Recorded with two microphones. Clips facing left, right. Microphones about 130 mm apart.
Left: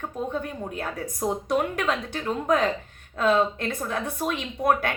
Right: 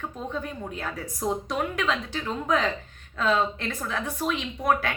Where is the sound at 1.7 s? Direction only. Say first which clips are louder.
Left 1 dB; 50° left (ahead or behind).